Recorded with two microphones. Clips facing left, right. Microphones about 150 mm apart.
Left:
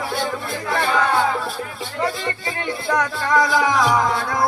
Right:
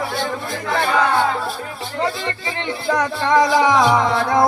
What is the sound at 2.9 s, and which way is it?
Music, 25° right (ahead or behind).